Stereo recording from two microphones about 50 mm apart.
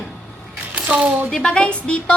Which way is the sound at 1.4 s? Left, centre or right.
Centre.